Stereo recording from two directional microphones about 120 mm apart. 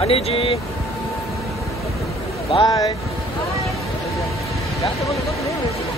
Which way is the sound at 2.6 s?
30° left (ahead or behind).